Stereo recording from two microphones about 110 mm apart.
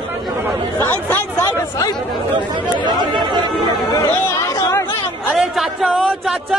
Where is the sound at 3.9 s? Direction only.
25° left (ahead or behind).